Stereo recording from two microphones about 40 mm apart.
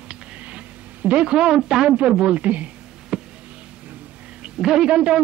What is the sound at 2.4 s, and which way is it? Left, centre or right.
Speech, right.